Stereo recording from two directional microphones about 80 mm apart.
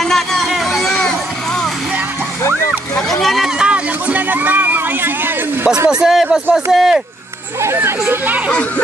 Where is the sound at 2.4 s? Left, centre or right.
Left.